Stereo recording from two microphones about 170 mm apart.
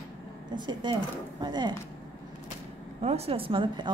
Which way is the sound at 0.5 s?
25° right (ahead or behind).